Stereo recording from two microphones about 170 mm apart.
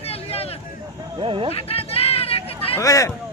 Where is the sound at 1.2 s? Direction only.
30° right (ahead or behind).